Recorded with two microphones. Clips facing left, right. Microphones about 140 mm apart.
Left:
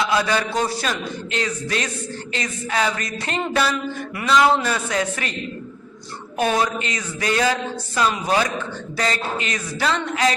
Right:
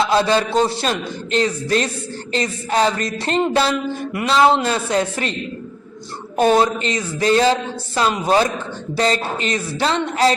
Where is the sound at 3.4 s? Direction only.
25° right (ahead or behind).